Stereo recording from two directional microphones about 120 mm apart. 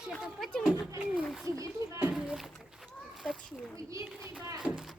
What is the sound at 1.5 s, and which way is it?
Speech, 25° right (ahead or behind).